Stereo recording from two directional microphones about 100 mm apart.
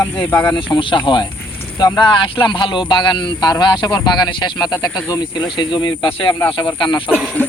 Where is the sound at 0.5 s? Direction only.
50° left (ahead or behind).